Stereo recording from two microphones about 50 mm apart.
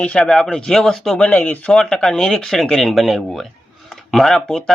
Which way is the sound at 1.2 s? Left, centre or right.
Left.